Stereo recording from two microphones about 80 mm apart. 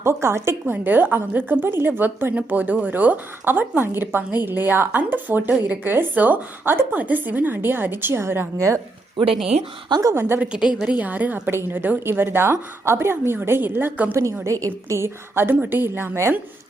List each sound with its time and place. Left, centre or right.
0.0 s a woman's voice: right
10.0 s a woman's voice: right
10.2 s a woman's voice: right
10.5 s a woman's voice: centre; by 14.2 s right
14.4 s a woman's voice: right